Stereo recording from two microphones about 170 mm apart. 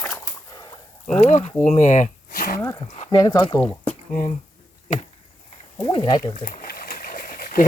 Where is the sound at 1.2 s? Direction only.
45° left (ahead or behind).